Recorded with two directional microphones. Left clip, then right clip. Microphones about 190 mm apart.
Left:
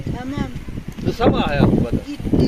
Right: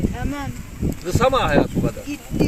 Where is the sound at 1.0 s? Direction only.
10° left (ahead or behind).